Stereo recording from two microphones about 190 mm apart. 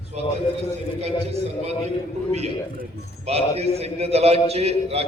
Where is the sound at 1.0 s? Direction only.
35° right (ahead or behind).